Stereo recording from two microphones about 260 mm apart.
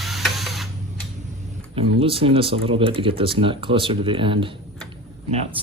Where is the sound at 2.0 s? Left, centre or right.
Right.